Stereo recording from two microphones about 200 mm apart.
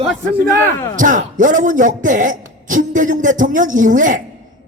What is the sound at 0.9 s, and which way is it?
A man's voice, 40° right (ahead or behind).